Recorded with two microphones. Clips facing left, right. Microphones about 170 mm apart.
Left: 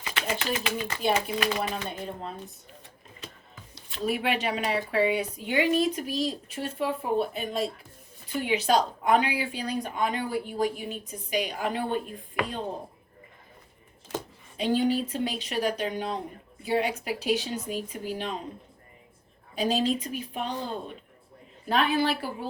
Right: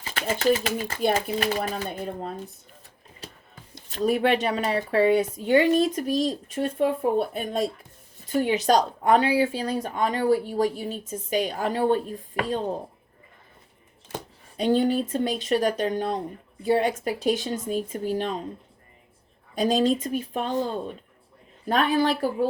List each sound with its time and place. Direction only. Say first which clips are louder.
0.0 s speech: right 7 dB; 40° right (ahead or behind)
1.9 s speech: right 4 dB; 45° right (ahead or behind)
3.8 s speech: right 6 dB; 45° right (ahead or behind)
14.5 s speech: right 3 dB; 45° right (ahead or behind)
19.5 s speech: right 4 dB; 45° right (ahead or behind)
21.7 s speech: right 3 dB; 45° right (ahead or behind)